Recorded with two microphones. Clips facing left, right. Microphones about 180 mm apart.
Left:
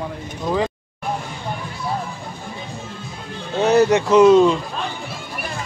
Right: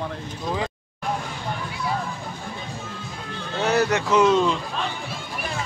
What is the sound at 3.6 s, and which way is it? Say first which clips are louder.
Speech: left 7 dB; 20° left (ahead or behind).